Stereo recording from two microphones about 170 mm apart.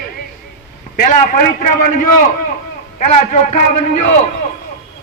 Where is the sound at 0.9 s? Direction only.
50° left (ahead or behind).